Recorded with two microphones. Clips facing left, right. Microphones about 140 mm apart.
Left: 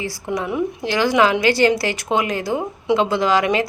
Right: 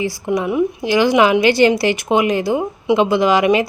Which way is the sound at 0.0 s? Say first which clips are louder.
Right 5 dB; 15° right (ahead or behind).